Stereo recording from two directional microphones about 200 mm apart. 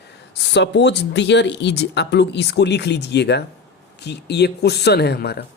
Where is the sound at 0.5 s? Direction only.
60° left (ahead or behind).